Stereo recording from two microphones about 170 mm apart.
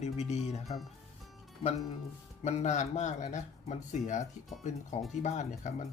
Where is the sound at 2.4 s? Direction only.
45° left (ahead or behind).